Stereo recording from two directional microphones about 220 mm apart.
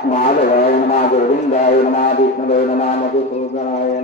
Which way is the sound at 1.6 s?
30° left (ahead or behind).